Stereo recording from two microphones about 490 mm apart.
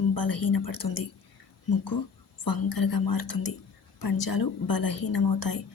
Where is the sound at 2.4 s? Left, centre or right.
Left.